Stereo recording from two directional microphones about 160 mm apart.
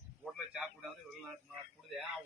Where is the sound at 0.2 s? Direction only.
5° right (ahead or behind).